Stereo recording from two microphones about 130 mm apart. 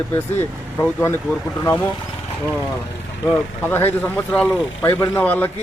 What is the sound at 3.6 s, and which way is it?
A man's voice, 15° left (ahead or behind).